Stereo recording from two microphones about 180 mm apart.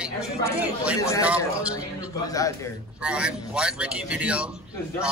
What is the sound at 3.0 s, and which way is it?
A man's voice, 5° right (ahead or behind).